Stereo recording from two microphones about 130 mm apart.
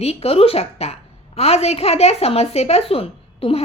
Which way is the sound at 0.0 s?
50° left (ahead or behind).